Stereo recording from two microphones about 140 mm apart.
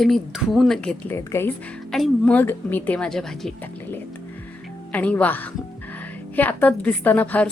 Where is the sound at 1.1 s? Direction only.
15° left (ahead or behind).